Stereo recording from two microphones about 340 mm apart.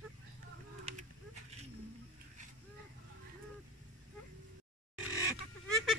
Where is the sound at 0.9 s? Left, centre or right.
Centre.